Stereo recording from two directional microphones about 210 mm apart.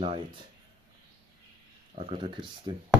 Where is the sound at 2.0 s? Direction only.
25° right (ahead or behind).